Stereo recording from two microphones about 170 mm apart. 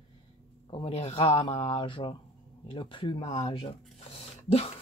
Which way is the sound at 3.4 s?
30° left (ahead or behind).